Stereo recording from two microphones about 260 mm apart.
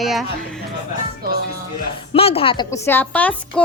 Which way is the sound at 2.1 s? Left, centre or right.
Left.